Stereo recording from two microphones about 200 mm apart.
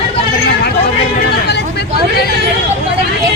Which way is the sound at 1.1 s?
55° left (ahead or behind).